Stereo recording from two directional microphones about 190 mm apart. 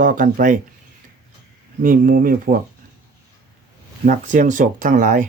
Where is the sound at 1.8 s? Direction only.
45° right (ahead or behind).